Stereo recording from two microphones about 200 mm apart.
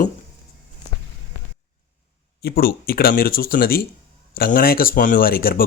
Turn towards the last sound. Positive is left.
turn(degrees=45)  # may be behind; listen again after turning